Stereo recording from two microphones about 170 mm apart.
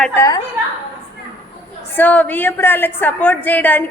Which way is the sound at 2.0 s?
10° left (ahead or behind).